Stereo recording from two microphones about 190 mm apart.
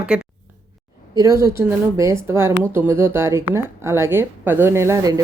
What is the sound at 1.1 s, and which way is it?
A woman's voice, 15° right (ahead or behind).